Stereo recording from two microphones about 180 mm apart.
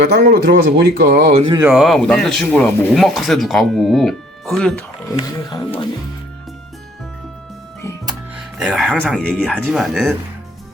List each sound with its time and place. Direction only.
0.0 s speech: 65° right (ahead or behind)
1.4 s speech: 25° right (ahead or behind)
1.6 s speech: centre (ahead or behind)
5.1 s speech: 25° left (ahead or behind)
8.4 s speech: 5° right (ahead or behind)